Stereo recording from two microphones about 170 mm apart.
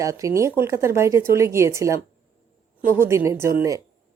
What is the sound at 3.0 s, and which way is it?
Speech, 15° right (ahead or behind).